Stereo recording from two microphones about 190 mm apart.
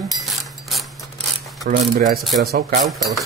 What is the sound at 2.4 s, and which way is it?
Speech, 55° right (ahead or behind).